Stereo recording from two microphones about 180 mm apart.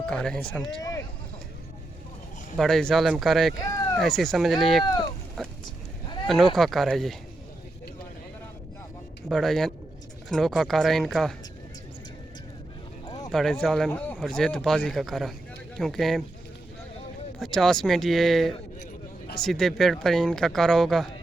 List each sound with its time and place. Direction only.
0.0 s speech: 5° left (ahead or behind)
0.8 s vehicle: 20° left (ahead or behind)
2.6 s speech: centre (ahead or behind)
3.6 s a sound: 20° left (ahead or behind)
3.9 s speech: centre (ahead or behind)
4.9 s speech: 25° left (ahead or behind)
5.4 s speech: 5° left (ahead or behind)
9.3 s speech: centre (ahead or behind)
13.1 s clip-clop: 20° left (ahead or behind)
13.3 s speech: 5° left (ahead or behind)
17.4 s speech: centre (ahead or behind)